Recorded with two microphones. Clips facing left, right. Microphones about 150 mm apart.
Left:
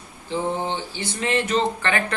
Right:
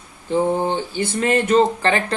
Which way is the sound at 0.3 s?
50° right (ahead or behind).